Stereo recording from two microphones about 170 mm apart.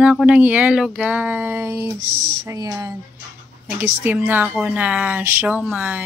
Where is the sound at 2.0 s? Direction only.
55° right (ahead or behind).